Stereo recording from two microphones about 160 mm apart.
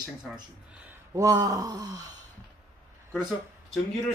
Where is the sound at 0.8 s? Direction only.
20° right (ahead or behind).